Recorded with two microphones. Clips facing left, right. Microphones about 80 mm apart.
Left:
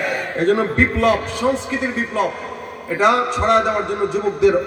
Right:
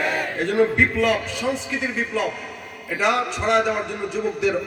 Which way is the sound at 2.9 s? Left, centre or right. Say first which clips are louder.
Left 6 dB; left.